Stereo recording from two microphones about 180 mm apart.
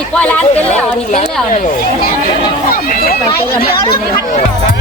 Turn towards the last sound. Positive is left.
turn(degrees=50)  # may be behind; listen again after turning